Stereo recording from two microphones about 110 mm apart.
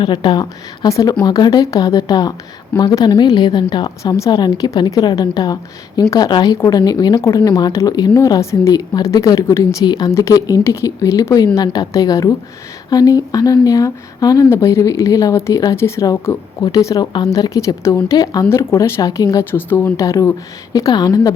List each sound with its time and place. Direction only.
0.0 s a woman's voice: 45° left (ahead or behind)
0.9 s speech: 30° left (ahead or behind)
4.0 s speech: 30° left (ahead or behind)
4.3 s speech: 40° left (ahead or behind)
9.8 s speech: 40° left (ahead or behind)
10.1 s speech: 25° left (ahead or behind)